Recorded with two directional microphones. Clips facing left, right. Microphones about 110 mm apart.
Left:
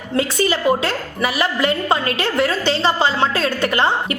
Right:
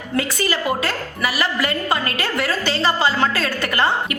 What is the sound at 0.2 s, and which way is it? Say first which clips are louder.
A woman's voice: left 4 dB; 25° left (ahead or behind).